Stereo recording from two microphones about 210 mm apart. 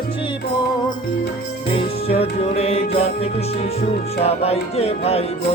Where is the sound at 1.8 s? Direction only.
30° left (ahead or behind).